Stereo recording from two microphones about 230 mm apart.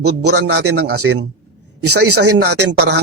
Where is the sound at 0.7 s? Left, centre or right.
Right.